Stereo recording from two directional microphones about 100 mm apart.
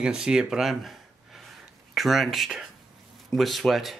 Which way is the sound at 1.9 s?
Centre (ahead or behind).